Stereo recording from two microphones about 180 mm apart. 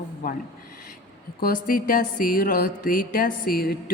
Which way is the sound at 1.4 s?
50° left (ahead or behind).